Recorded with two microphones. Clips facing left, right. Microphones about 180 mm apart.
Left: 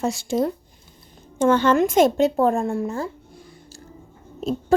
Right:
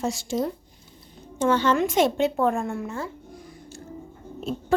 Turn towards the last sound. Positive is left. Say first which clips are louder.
# left 5 dB
turn(degrees=40)  # may be behind; listen again after turning